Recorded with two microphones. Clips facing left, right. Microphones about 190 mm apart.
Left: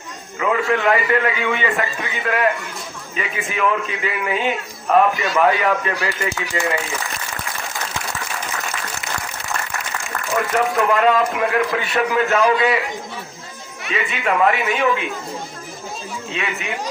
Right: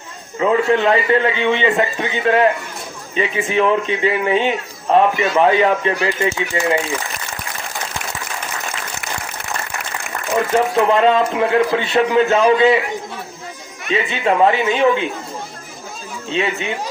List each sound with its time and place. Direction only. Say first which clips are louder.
0.3 s a man's voice: right 4 dB; 30° right (ahead or behind)
10.3 s a man's voice: right 3 dB; 25° right (ahead or behind)
13.8 s a man's voice: right 4 dB; 30° right (ahead or behind)
16.3 s speech: right 7 dB; 30° right (ahead or behind)